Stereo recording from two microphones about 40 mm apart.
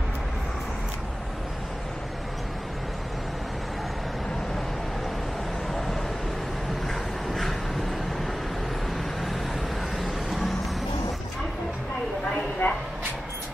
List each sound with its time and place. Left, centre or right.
5.7 s vehicle: centre
7.2 s vehicle: centre
9.9 s vehicle: centre
12.6 s a sound: left